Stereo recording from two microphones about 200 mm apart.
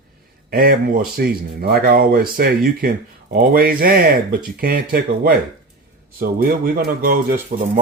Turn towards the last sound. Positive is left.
turn(degrees=-40)  # may be behind; listen again after turning